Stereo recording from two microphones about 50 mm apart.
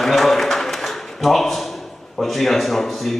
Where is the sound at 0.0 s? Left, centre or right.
Centre.